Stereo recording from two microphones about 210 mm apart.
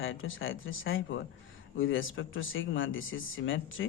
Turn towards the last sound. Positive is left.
turn(degrees=70)  # may be behind; listen again after turning